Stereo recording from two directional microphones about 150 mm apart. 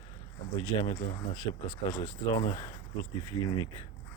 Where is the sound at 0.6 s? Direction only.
35° left (ahead or behind).